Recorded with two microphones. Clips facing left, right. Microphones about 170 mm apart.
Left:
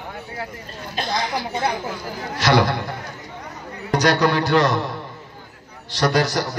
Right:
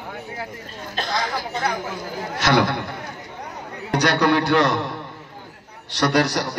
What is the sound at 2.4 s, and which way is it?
Speech, 55° right (ahead or behind).